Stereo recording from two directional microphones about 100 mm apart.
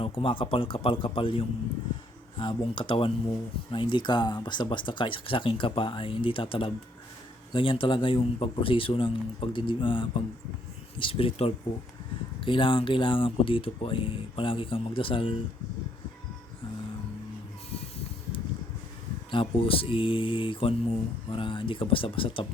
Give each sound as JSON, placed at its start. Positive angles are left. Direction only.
{"t": 0.0, "sound": "speech", "side_deg": 65}
{"t": 19.3, "sound": "speech", "side_deg": 60}